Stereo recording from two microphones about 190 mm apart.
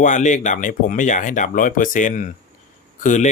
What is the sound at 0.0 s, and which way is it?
Speech, 40° left (ahead or behind).